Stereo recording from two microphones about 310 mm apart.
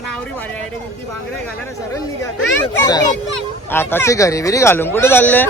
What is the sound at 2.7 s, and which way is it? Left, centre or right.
Speech, centre.